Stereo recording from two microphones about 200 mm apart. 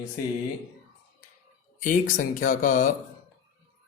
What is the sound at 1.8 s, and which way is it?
Speech, 40° left (ahead or behind).